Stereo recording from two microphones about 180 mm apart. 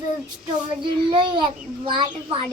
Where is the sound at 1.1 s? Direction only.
30° right (ahead or behind).